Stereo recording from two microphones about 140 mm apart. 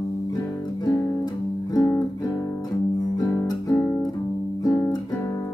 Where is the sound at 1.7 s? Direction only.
25° left (ahead or behind).